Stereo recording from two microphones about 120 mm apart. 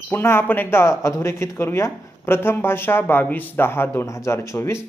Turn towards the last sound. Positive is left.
turn(degrees=20)  # may be behind; listen again after turning